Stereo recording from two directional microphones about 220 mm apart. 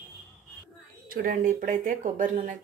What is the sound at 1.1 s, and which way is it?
A woman's voice, 40° right (ahead or behind).